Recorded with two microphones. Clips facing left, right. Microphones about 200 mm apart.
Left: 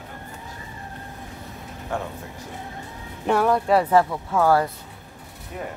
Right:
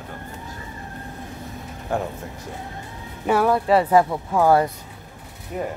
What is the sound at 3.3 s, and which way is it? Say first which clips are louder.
Speech: right 1 dB; 5° right (ahead or behind).